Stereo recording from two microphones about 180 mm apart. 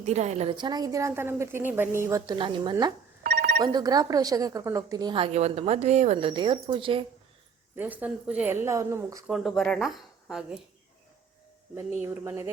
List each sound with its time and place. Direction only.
0.0 s a woman's voice: 40° right (ahead or behind)
7.8 s speech: 10° right (ahead or behind)
9.2 s speech: centre (ahead or behind)
12.0 s speech: 15° right (ahead or behind)